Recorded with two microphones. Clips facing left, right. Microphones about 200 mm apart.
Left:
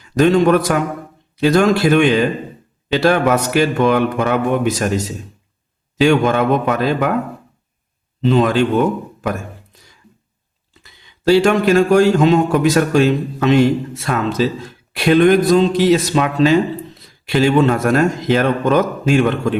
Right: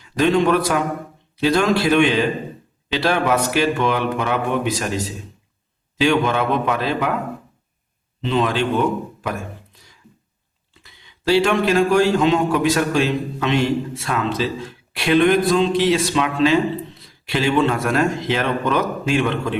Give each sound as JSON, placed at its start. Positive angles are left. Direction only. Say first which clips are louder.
{"t": 0.0, "sound": "a man's voice", "louder": "left 4 dB", "side_deg": 45}
{"t": 8.2, "sound": "a man's voice", "louder": "left 6 dB", "side_deg": 45}
{"t": 10.8, "sound": "a man's voice", "louder": "left 2 dB", "side_deg": 45}